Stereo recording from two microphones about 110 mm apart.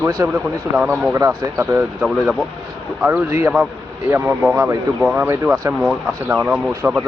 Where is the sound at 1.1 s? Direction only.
30° right (ahead or behind).